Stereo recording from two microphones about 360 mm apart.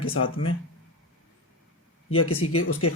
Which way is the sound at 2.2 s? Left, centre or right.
Left.